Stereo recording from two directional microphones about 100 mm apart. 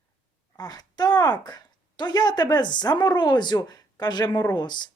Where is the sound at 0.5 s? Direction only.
40° left (ahead or behind).